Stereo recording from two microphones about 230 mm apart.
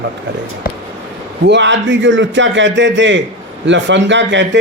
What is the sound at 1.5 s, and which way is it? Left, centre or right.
A man's voice, right.